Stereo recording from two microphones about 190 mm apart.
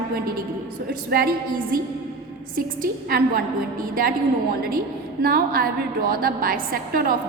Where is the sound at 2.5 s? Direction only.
50° right (ahead or behind).